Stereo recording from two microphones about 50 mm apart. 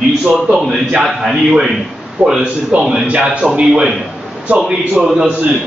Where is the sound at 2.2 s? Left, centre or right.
Right.